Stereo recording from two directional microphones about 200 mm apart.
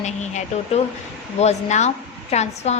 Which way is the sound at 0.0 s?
35° left (ahead or behind).